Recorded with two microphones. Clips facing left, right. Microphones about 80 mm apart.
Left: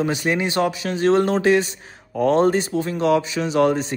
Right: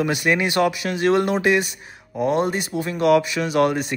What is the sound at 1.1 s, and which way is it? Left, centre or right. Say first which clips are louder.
Speech: left 2 dB; left.